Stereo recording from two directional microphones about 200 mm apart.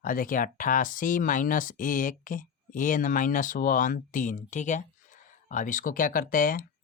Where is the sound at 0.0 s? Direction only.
45° left (ahead or behind).